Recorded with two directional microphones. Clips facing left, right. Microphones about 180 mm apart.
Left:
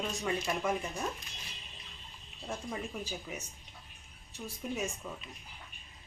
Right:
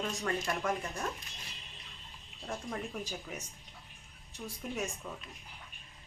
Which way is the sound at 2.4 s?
Centre (ahead or behind).